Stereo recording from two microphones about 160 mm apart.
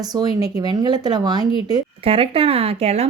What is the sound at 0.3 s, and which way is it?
Speech, 25° right (ahead or behind).